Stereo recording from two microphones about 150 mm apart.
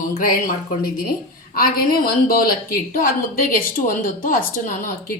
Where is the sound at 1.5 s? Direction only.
80° left.